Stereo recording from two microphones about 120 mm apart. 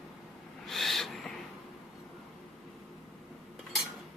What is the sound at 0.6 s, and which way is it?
Owl, centre (ahead or behind).